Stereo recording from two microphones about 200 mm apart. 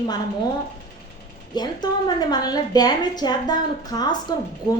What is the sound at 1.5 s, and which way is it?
A woman's voice, 20° left (ahead or behind).